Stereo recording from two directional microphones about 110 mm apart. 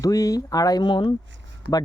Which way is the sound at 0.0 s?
30° left (ahead or behind).